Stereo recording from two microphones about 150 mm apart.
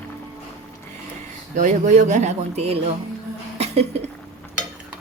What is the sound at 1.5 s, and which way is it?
Speech, 55° right (ahead or behind).